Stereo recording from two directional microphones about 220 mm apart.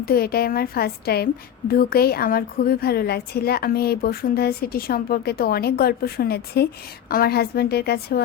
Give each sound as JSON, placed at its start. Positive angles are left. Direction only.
{"t": 0.0, "sound": "a woman's voice", "side_deg": 45}